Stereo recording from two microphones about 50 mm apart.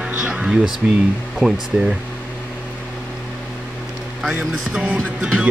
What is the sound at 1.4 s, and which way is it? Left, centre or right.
Speech, centre.